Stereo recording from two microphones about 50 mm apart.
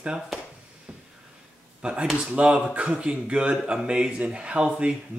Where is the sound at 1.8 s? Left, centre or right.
Centre.